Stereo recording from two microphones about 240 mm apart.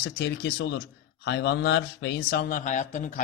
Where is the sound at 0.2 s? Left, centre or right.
Left.